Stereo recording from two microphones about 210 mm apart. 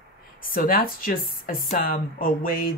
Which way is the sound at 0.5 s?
45° left (ahead or behind).